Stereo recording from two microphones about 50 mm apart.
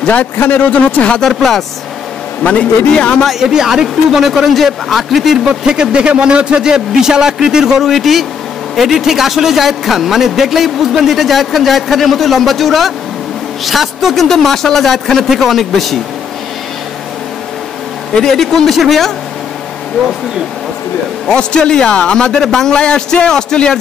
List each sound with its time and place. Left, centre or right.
0.0 s a man's voice: left
1.0 s speech: left
1.3 s a man's voice: centre
2.4 s speech: left
3.3 s a man's voice: centre
5.5 s a man's voice: centre
7.9 s a man's voice: centre
18.2 s a man's voice: centre
21.3 s a man's voice: centre